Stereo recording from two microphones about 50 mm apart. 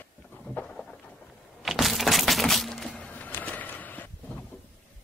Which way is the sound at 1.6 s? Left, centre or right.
Centre.